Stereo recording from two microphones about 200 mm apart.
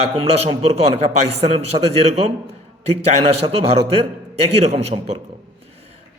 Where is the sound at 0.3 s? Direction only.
30° right (ahead or behind).